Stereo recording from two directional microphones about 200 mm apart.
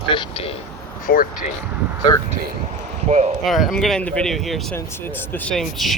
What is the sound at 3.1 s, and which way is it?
Speech, 35° right (ahead or behind).